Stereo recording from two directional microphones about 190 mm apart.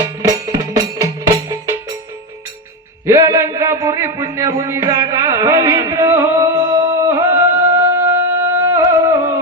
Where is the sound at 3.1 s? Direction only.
15° right (ahead or behind).